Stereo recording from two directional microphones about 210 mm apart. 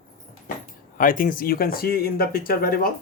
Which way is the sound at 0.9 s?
40° left (ahead or behind).